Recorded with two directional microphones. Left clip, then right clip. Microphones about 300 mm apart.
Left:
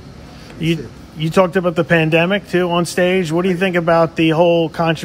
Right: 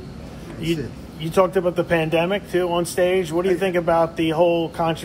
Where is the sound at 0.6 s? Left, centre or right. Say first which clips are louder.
Left 4 dB; left.